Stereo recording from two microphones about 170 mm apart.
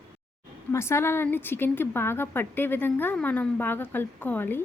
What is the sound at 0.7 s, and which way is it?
A woman's voice, 15° left (ahead or behind).